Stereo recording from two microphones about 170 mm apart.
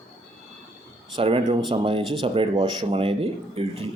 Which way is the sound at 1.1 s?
30° right (ahead or behind).